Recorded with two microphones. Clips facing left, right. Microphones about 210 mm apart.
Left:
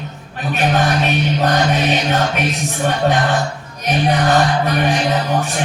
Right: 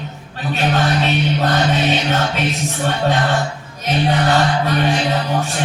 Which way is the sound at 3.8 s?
15° left (ahead or behind).